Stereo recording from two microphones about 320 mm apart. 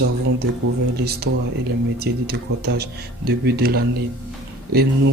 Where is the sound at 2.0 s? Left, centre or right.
Right.